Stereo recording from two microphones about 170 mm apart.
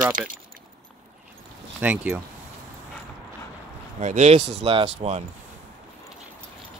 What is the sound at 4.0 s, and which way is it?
Speech, 45° right (ahead or behind).